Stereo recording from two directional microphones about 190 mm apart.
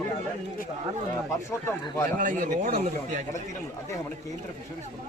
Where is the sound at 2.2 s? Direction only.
45° right (ahead or behind).